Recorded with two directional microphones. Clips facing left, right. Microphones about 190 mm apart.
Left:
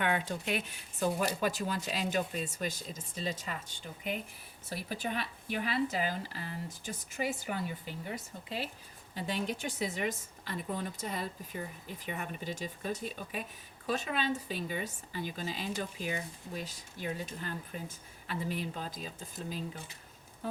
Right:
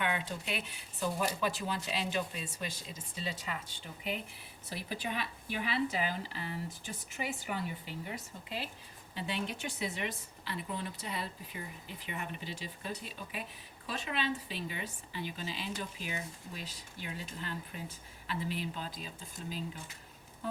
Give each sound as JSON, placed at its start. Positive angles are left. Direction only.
{"t": 0.0, "sound": "a woman's voice", "side_deg": 45}
{"t": 9.1, "sound": "a woman's voice", "side_deg": 40}